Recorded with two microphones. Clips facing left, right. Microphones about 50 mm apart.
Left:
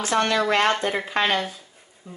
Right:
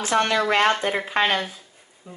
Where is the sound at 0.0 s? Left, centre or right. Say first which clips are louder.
Right 1 dB; centre.